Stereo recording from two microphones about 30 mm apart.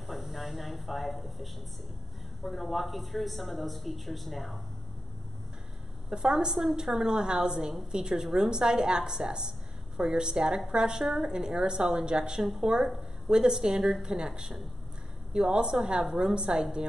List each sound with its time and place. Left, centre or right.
0.0 s a sound: centre
2.4 s speech: centre
6.0 s a woman's voice: right